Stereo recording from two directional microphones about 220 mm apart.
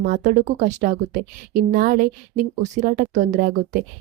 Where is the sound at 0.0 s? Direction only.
35° right (ahead or behind).